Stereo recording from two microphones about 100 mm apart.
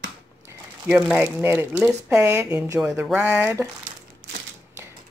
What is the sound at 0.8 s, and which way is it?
Speech, 10° right (ahead or behind).